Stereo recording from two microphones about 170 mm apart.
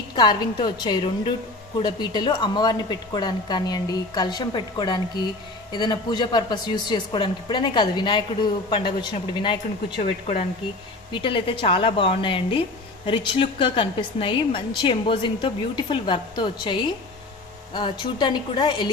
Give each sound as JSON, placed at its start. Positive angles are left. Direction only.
{"t": 0.2, "sound": "a woman's voice", "side_deg": 25}